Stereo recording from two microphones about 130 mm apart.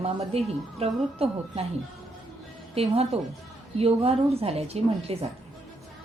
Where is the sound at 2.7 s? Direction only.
50° right (ahead or behind).